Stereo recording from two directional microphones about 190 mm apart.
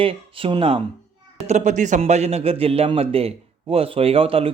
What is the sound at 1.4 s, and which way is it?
A man's voice, 40° right (ahead or behind).